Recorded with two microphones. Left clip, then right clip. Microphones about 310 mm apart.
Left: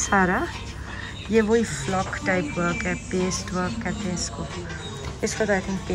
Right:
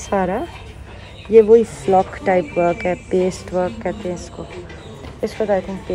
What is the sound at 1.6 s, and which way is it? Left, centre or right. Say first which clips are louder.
Speech: right 11 dB; centre.